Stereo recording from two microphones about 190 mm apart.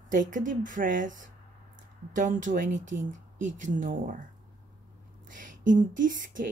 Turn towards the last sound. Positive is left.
turn(degrees=-45)  # may be behind; listen again after turning